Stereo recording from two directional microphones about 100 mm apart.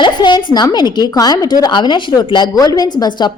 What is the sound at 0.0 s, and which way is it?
Speech, 45° left (ahead or behind).